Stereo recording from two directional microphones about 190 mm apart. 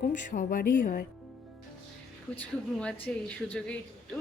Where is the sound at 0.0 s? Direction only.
45° left (ahead or behind).